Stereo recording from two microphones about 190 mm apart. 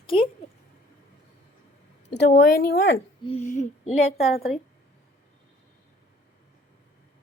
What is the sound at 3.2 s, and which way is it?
Speech, 35° left (ahead or behind).